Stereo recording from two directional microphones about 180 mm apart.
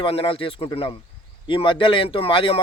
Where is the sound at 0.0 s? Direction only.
30° left (ahead or behind).